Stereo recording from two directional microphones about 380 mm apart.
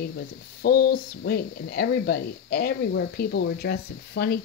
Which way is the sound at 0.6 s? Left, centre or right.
Left.